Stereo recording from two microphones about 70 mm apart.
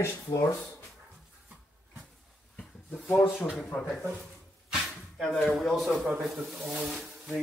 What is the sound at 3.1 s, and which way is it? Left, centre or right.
Speech, left.